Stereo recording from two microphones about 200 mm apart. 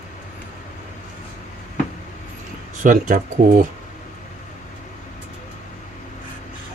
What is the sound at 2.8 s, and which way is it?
Speech, 40° right (ahead or behind).